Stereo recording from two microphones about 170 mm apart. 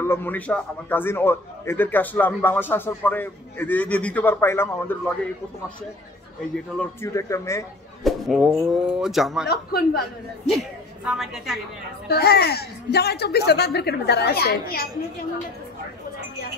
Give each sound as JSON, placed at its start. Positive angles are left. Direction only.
{"t": 0.0, "sound": "a man's voice", "side_deg": 15}
{"t": 6.8, "sound": "a man's voice", "side_deg": 15}
{"t": 8.0, "sound": "speech", "side_deg": 0}
{"t": 9.5, "sound": "a woman's voice", "side_deg": 65}
{"t": 10.5, "sound": "a woman's voice", "side_deg": 0}
{"t": 12.1, "sound": "a woman's voice", "side_deg": 70}